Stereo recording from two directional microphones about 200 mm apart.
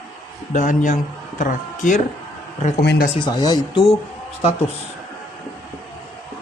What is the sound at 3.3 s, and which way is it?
Speech, 20° left (ahead or behind).